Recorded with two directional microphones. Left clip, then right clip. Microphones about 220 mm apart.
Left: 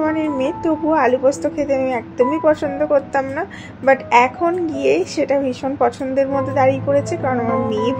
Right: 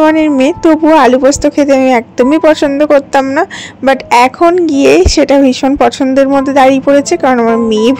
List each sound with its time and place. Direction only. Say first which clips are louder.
0.0 s a woman's voice: right 11 dB; 45° right (ahead or behind)